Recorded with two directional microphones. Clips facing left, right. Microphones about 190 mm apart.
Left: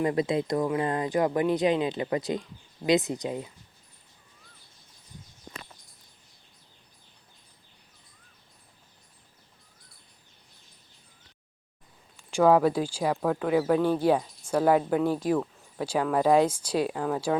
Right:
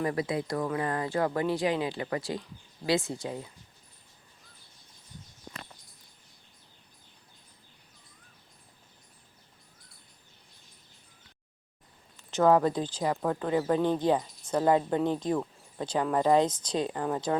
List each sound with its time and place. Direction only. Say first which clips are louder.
0.0 s speech: left 4 dB; 20° left (ahead or behind)
12.1 s speech: left 2 dB; 10° left (ahead or behind)